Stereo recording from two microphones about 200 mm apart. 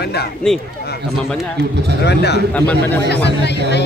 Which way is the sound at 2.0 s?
55° left (ahead or behind).